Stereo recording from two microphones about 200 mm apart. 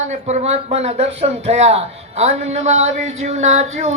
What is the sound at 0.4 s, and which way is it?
Music, 30° right (ahead or behind).